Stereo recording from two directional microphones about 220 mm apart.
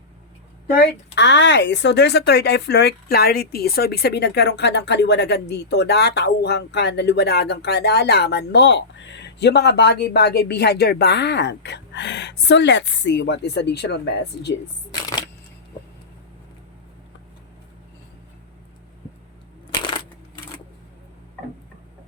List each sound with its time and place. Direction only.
0.7 s speech: 50° left (ahead or behind)
19.8 s crushing: 20° left (ahead or behind)